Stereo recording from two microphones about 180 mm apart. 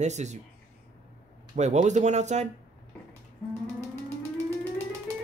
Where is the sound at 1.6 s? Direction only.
40° right (ahead or behind).